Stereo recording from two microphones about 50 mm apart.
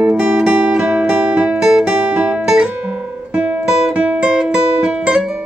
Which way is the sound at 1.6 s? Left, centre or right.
Centre.